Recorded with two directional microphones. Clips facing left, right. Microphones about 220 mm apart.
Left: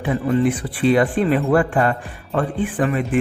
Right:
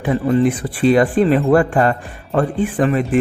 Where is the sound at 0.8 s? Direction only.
40° right (ahead or behind).